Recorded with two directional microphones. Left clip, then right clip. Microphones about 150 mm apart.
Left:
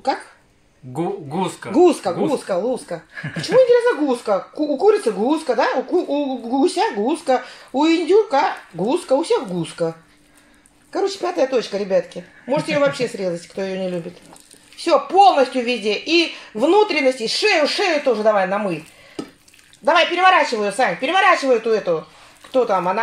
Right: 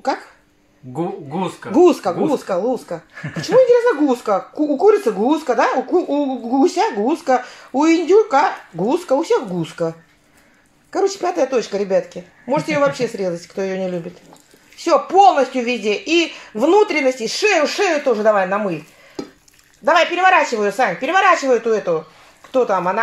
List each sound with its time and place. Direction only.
0.9 s speech: 10° left (ahead or behind)
1.7 s speech: 10° right (ahead or behind)
11.2 s speech: 15° right (ahead or behind)
19.8 s speech: 5° right (ahead or behind)